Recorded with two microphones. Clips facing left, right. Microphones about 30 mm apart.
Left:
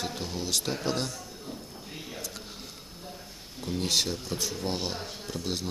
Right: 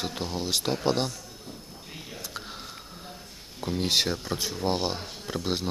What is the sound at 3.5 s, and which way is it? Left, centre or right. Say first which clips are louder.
Speech: right 3 dB; right.